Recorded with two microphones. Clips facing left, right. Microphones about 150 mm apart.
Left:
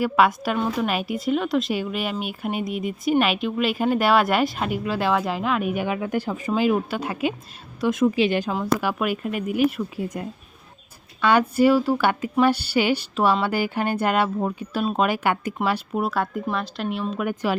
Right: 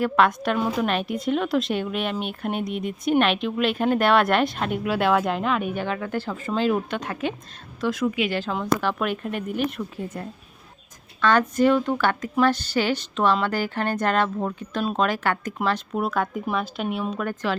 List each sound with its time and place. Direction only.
0.0 s a woman's voice: 5° left (ahead or behind)
7.8 s a woman's voice: 20° left (ahead or behind)
8.0 s a woman's voice: 30° left (ahead or behind)
8.3 s a woman's voice: 15° left (ahead or behind)